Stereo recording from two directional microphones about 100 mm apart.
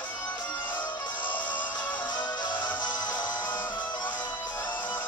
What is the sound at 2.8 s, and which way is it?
Music, 45° left (ahead or behind).